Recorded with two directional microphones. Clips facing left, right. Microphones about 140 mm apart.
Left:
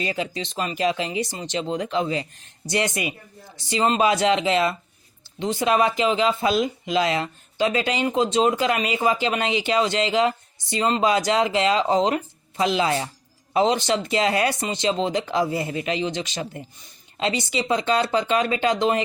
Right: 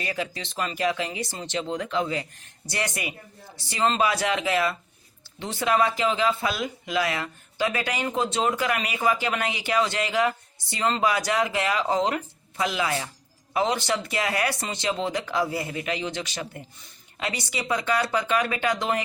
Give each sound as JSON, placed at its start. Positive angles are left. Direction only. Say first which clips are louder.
{"t": 0.0, "sound": "speech", "louder": "left 4 dB", "side_deg": 20}